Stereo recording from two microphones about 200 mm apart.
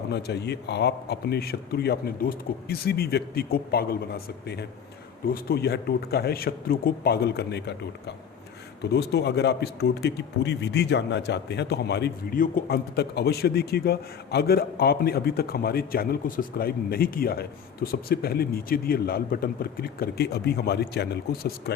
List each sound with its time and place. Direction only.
0.1 s a man's voice: 55° left (ahead or behind)